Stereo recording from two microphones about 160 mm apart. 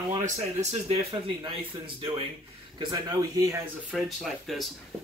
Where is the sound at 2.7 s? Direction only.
25° right (ahead or behind).